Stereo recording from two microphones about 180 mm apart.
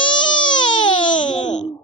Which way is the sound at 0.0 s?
25° left (ahead or behind).